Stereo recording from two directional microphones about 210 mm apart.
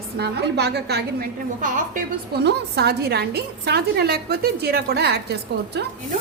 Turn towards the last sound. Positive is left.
turn(degrees=-50)  # may be behind; listen again after turning